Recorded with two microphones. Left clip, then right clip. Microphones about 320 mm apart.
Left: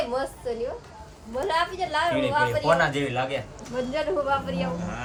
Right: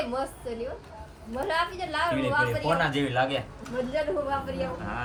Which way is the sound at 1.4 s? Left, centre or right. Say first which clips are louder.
Left 3 dB; left.